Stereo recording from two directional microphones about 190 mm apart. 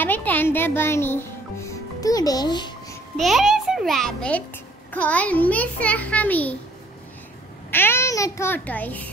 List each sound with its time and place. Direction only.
0.0 s music: 10° left (ahead or behind)
3.2 s a child's voice: centre (ahead or behind)
7.7 s a child's voice: 10° left (ahead or behind)